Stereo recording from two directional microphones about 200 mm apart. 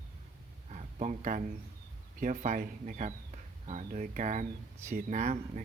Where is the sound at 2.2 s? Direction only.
40° right (ahead or behind).